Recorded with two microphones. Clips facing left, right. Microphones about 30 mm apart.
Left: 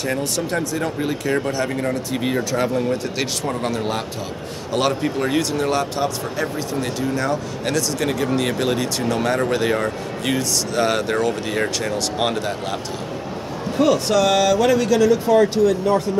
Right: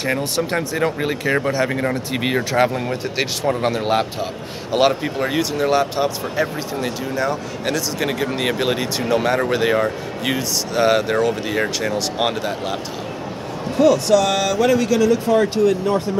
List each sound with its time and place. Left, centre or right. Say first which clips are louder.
0.0 s speech: right 2 dB; right
7.0 s speech: left 1 dB; centre
13.7 s a man's voice: right 3 dB; centre